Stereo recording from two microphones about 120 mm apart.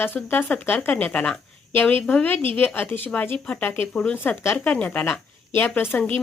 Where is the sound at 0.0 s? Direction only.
15° left (ahead or behind).